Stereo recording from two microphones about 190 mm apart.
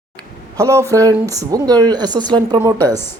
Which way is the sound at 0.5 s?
15° right (ahead or behind).